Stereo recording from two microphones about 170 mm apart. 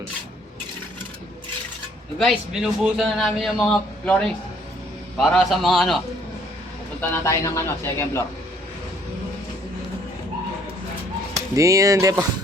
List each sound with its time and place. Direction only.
2.1 s a man's voice: centre (ahead or behind)
7.1 s a man's voice: 20° left (ahead or behind)
11.5 s speech: 20° right (ahead or behind)